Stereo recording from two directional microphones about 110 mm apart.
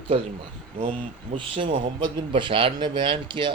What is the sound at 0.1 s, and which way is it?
Speech, 60° right (ahead or behind).